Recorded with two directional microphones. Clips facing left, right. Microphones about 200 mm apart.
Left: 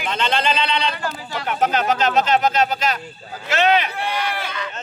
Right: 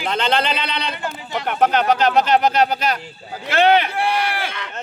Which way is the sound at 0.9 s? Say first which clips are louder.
Right 1 dB; 20° right (ahead or behind).